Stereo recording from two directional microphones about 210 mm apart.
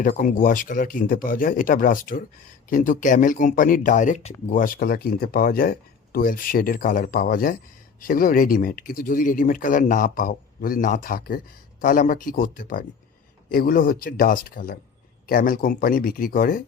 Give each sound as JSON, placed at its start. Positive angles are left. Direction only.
{"t": 0.0, "sound": "speech", "side_deg": 40}